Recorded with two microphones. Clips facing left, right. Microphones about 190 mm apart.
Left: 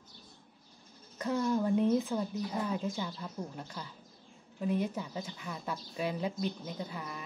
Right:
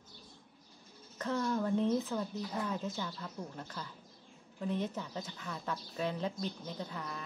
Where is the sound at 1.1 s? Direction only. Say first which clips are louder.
Left 3 dB; 10° left (ahead or behind).